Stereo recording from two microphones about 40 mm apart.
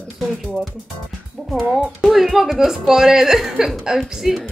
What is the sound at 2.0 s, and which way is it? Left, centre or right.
Speech, centre.